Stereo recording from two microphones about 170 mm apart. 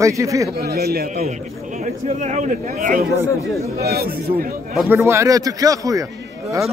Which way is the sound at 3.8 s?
65° right (ahead or behind).